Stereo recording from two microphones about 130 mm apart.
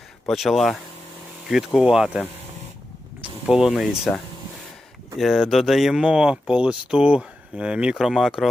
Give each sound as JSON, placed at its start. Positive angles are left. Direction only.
{"t": 0.3, "sound": "speech", "side_deg": 0}
{"t": 3.4, "sound": "speech", "side_deg": -5}
{"t": 5.1, "sound": "speech", "side_deg": 0}